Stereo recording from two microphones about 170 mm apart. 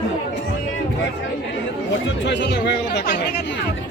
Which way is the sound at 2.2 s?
90° left.